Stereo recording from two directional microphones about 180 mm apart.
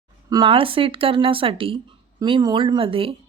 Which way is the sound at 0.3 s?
25° right (ahead or behind).